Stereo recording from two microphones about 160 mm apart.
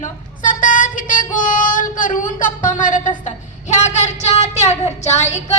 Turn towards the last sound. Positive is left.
turn(degrees=45)  # may be behind; listen again after turning